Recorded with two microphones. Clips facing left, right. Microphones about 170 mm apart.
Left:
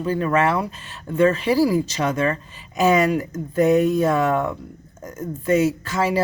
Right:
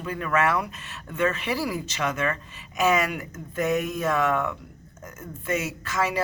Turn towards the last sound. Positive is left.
turn(degrees=30)  # may be behind; listen again after turning